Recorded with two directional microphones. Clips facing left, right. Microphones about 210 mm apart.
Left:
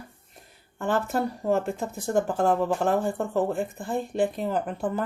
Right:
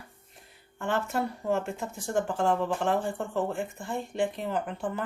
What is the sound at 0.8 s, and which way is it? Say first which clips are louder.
Speech: left 3 dB; 40° left (ahead or behind).